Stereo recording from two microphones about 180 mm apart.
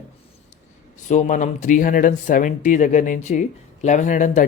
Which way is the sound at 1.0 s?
45° left (ahead or behind).